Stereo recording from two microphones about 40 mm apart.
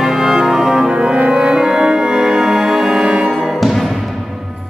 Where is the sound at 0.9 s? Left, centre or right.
Right.